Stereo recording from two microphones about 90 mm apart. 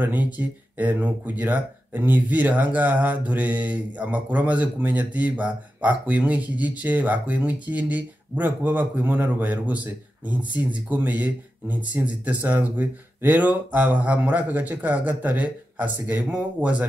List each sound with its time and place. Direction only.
0.0 s speech: 20° right (ahead or behind)